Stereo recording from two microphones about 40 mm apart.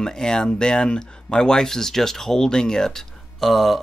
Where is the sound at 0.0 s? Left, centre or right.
Centre.